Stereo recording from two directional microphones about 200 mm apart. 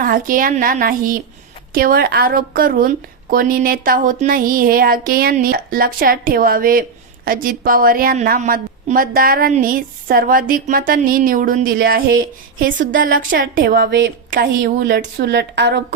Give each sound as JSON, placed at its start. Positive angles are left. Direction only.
{"t": 0.0, "sound": "a woman's voice", "side_deg": -45}
{"t": 14.3, "sound": "a woman's voice", "side_deg": -45}